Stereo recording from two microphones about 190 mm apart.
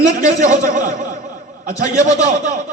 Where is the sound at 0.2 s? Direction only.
40° right (ahead or behind).